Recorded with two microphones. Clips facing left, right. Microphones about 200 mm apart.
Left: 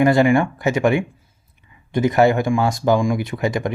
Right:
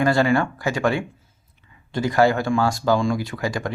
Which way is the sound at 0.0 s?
20° left (ahead or behind).